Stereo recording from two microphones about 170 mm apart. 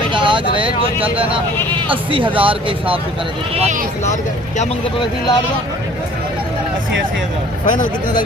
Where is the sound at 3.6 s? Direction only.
45° right (ahead or behind).